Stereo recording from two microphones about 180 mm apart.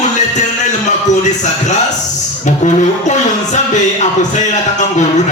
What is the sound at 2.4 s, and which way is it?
Music, 40° left (ahead or behind).